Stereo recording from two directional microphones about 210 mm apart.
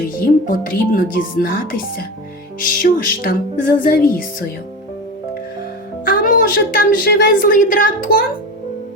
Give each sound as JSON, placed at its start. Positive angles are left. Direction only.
{"t": 0.2, "sound": "a woman's voice", "side_deg": 40}
{"t": 6.1, "sound": "a woman's voice", "side_deg": 40}